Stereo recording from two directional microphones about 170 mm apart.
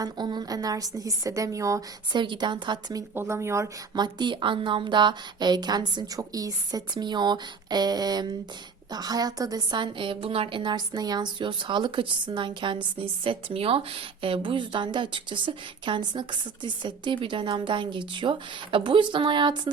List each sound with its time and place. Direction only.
0.0 s a woman's voice: 25° right (ahead or behind)
3.2 s a woman's voice: 15° right (ahead or behind)